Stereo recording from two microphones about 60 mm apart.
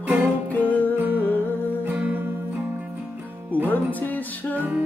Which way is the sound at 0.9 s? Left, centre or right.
Right.